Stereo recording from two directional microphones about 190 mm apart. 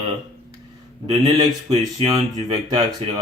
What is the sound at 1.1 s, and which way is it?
Speech, 25° right (ahead or behind).